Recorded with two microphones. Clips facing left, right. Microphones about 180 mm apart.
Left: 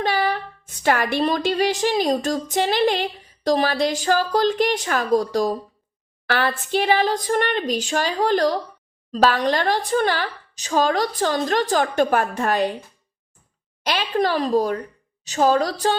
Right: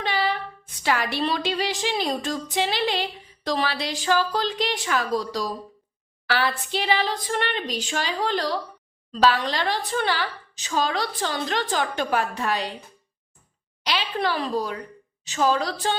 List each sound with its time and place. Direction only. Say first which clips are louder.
0.0 s a woman's voice: left 4 dB; 45° left (ahead or behind)
13.8 s a woman's voice: left 4 dB; 45° left (ahead or behind)